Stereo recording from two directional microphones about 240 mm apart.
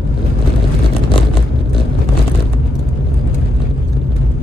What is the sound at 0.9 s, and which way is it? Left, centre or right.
Vehicle, left.